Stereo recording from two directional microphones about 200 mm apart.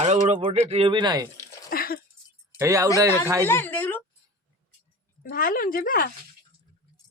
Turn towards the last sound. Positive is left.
turn(degrees=45)  # may be behind; listen again after turning